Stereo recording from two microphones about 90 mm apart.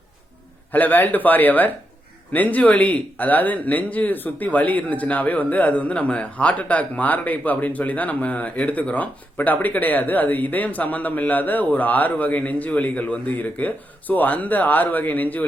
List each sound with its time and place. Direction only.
0.7 s speech: 20° left (ahead or behind)